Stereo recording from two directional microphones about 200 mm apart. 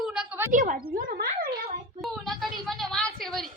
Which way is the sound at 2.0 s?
Centre (ahead or behind).